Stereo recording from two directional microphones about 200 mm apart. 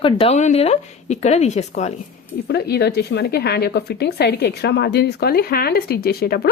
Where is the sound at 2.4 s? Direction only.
55° left (ahead or behind).